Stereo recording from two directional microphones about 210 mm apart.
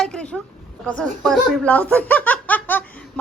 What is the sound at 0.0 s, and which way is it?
A woman's voice, 5° left (ahead or behind).